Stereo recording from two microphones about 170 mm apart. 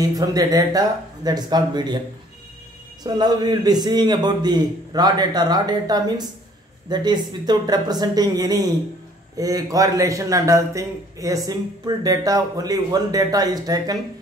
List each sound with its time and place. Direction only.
0.0 s a man's voice: 20° right (ahead or behind)
3.0 s a man's voice: 25° right (ahead or behind)